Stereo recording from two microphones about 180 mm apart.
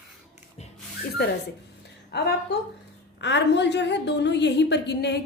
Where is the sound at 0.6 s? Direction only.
35° left (ahead or behind).